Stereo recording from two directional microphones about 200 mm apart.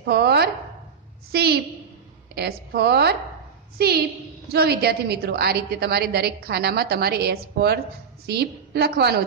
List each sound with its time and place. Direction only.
0.0 s a woman's voice: 55° right (ahead or behind)